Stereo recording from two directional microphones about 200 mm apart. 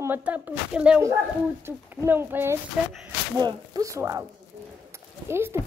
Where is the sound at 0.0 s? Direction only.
10° right (ahead or behind).